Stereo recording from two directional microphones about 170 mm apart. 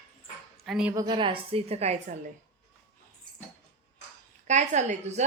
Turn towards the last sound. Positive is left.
turn(degrees=-40)  # may be behind; listen again after turning